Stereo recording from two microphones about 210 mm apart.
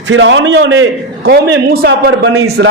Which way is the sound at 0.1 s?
60° right (ahead or behind).